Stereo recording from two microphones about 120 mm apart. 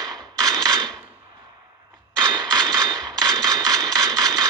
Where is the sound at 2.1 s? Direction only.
35° right (ahead or behind).